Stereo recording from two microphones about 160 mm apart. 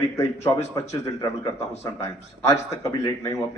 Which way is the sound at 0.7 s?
20° left (ahead or behind).